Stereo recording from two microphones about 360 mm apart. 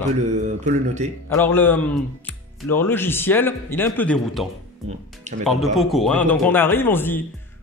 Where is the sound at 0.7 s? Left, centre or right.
Centre.